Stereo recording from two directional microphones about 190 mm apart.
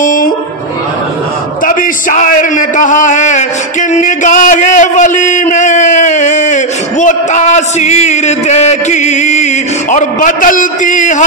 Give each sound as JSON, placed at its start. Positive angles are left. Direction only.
{"t": 0.0, "sound": "music", "side_deg": 45}
{"t": 1.7, "sound": "a man's voice", "side_deg": 45}
{"t": 3.9, "sound": "a sound", "side_deg": 40}